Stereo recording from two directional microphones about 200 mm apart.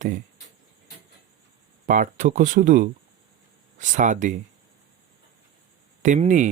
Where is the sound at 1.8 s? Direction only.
40° right (ahead or behind).